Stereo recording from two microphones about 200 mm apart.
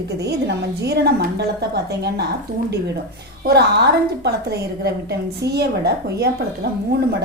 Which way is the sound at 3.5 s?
55° right (ahead or behind).